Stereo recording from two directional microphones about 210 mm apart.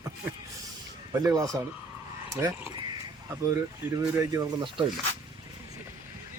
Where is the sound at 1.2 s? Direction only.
15° right (ahead or behind).